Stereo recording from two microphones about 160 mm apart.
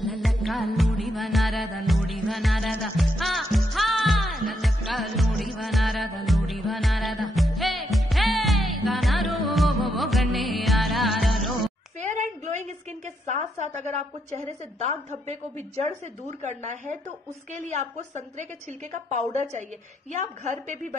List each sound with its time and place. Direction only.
0.0 s music: centre (ahead or behind)
12.0 s a sound: 50° right (ahead or behind)
13.7 s a woman's voice: 45° right (ahead or behind)